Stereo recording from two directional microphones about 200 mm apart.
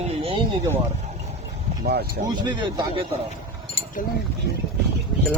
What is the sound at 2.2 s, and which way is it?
Speech, 20° right (ahead or behind).